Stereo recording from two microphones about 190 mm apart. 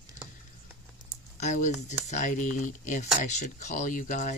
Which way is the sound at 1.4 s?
40° left (ahead or behind).